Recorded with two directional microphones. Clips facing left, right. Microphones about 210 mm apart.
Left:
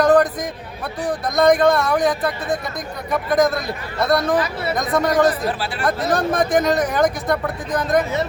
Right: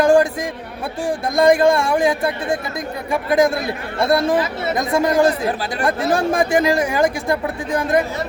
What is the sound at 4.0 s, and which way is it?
Speech, 25° right (ahead or behind).